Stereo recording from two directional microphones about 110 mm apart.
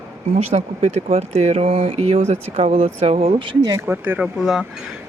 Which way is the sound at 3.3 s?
40° right (ahead or behind).